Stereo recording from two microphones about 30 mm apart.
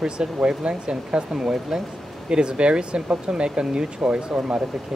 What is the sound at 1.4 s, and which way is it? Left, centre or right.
Speech, centre.